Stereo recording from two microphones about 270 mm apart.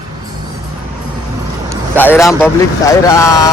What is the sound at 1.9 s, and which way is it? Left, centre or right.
Speech, centre.